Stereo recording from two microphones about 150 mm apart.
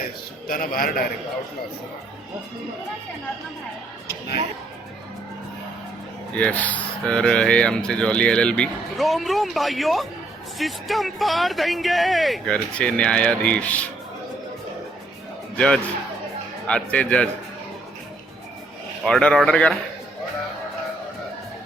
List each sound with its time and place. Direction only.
0.4 s a man's voice: 70° left (ahead or behind)
6.3 s speech: 10° left (ahead or behind)
15.5 s a man's voice: 5° left (ahead or behind)
19.0 s speech: 5° left (ahead or behind)